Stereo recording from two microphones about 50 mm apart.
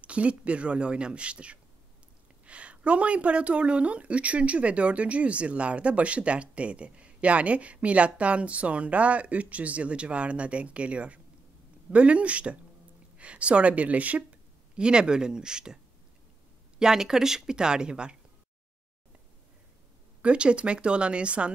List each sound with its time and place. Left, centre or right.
0.0 s speech: right
14.8 s speech: centre
20.2 s speech: right